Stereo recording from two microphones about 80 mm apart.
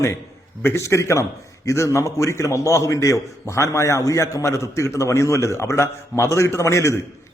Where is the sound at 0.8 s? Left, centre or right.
Left.